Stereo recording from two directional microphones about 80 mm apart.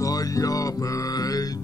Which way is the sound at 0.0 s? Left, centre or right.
Left.